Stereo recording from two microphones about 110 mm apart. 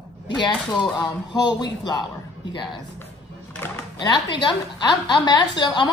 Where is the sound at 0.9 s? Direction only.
40° left (ahead or behind).